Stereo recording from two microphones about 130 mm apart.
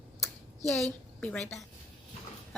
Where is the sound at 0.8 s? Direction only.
10° left (ahead or behind).